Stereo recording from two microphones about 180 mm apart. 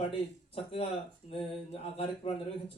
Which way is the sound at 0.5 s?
35° left (ahead or behind).